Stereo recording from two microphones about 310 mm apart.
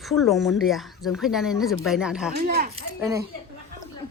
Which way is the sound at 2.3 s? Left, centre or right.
Right.